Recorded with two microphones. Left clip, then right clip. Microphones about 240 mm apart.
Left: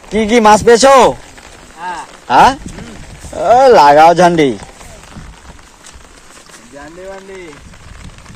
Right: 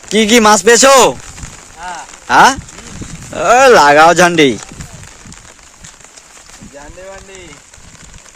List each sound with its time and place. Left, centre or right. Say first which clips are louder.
0.1 s speech: even; right
2.2 s speech: even; right